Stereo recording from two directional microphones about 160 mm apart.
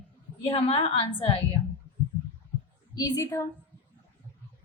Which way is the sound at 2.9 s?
20° left (ahead or behind).